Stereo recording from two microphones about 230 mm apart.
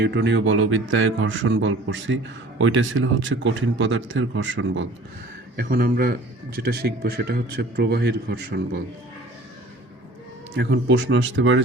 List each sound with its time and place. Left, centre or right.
0.0 s speech: right
5.5 s a man's voice: right
10.5 s a man's voice: right